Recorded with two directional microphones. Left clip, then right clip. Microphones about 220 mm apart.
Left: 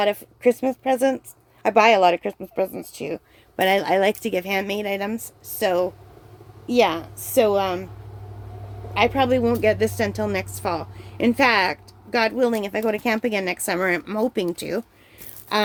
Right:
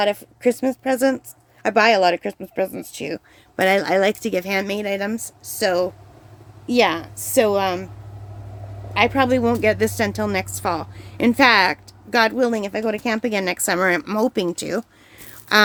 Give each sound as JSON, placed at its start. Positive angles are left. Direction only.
{"t": 0.0, "sound": "speech", "side_deg": -15}
{"t": 8.9, "sound": "a woman's voice", "side_deg": -15}